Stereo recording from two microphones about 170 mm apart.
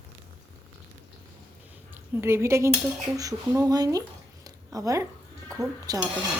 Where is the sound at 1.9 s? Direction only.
15° right (ahead or behind).